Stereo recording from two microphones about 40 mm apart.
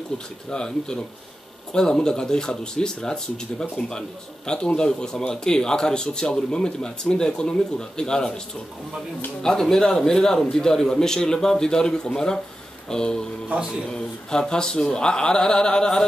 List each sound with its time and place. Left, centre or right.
0.5 s a man's voice: centre
9.4 s a man's voice: centre